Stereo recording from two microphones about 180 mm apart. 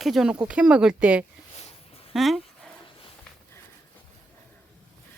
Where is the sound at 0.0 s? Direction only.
Centre (ahead or behind).